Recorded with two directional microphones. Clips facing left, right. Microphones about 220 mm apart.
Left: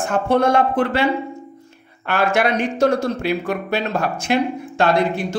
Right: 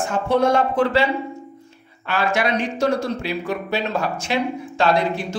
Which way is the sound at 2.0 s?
55° left (ahead or behind).